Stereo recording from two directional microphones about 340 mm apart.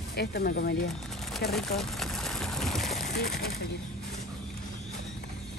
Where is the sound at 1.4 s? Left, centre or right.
Centre.